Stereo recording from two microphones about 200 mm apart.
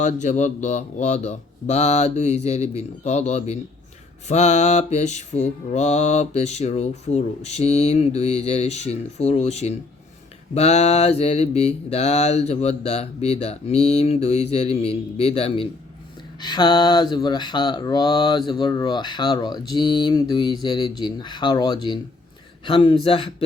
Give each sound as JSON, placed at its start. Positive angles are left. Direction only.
{"t": 0.0, "sound": "mantra", "side_deg": 35}
{"t": 16.4, "sound": "speech", "side_deg": 20}